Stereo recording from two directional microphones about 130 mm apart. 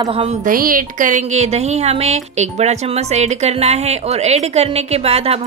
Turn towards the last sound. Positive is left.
turn(degrees=-50)  # may be behind; listen again after turning